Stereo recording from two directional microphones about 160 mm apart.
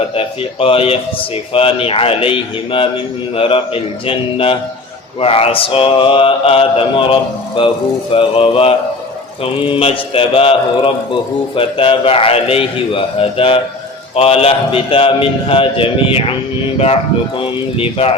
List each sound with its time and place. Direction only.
0.2 s mantra: 35° left (ahead or behind)
16.7 s speech: 40° left (ahead or behind)
17.4 s mantra: 35° left (ahead or behind)